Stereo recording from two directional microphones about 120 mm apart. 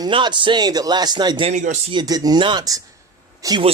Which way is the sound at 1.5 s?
90° right.